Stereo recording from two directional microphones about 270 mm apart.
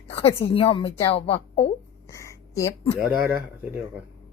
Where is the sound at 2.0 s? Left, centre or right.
Centre.